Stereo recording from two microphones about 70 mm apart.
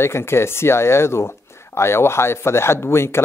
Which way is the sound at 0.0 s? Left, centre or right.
Left.